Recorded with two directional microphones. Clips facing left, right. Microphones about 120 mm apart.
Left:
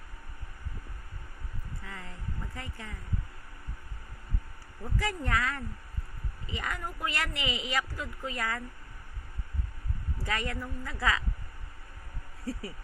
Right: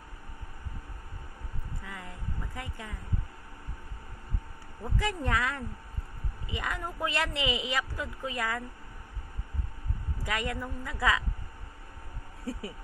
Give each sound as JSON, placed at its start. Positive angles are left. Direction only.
{"t": 1.9, "sound": "music", "side_deg": -15}
{"t": 4.9, "sound": "speech", "side_deg": -20}
{"t": 10.2, "sound": "a woman's voice", "side_deg": -15}